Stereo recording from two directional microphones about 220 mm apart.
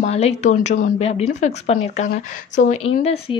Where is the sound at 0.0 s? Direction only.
30° left (ahead or behind).